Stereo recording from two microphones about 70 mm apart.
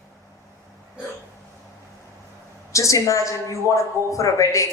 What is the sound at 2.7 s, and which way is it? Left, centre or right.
A man's voice, left.